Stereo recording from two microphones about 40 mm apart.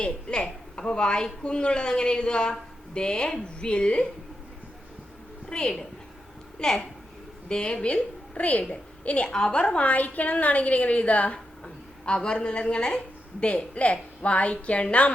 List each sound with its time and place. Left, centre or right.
0.0 s a man's voice: left
5.5 s a woman's voice: centre
9.3 s a woman's voice: left
11.6 s a woman's voice: left